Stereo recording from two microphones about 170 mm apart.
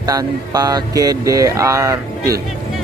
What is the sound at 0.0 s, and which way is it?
Speech, 20° right (ahead or behind).